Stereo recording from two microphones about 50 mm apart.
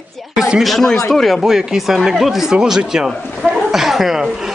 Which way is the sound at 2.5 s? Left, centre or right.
Centre.